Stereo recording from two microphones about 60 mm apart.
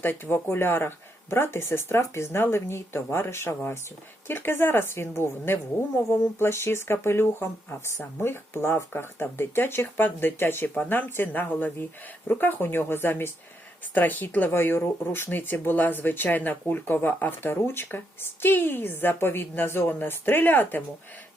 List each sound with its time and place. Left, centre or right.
0.0 s speech: left